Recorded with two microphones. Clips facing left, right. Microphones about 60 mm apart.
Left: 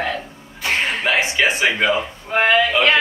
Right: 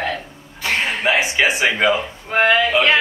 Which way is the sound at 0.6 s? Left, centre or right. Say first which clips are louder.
Even; centre.